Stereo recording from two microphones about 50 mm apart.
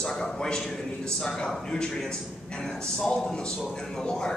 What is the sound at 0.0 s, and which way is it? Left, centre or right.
A man's voice, centre.